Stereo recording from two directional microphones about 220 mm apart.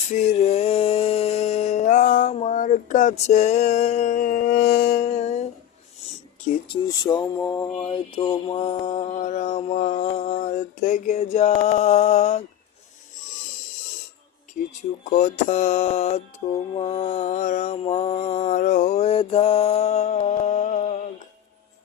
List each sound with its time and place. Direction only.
0.1 s a sound: 30° left (ahead or behind)
6.8 s speech: 20° left (ahead or behind)
14.7 s speech: 35° left (ahead or behind)